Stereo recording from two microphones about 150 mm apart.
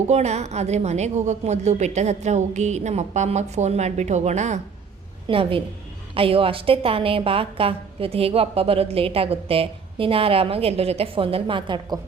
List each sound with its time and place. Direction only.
0.1 s a woman's voice: 45° right (ahead or behind)
5.3 s a woman's voice: 35° right (ahead or behind)